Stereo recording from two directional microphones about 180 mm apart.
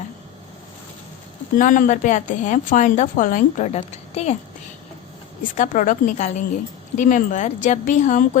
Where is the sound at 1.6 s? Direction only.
45° left (ahead or behind).